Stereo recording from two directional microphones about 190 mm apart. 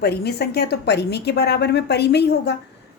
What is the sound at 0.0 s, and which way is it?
A woman's voice, 55° left (ahead or behind).